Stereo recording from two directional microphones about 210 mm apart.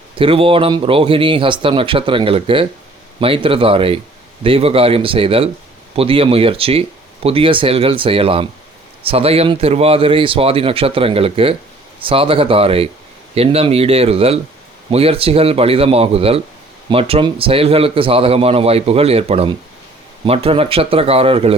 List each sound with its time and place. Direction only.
0.2 s a man's voice: 25° right (ahead or behind)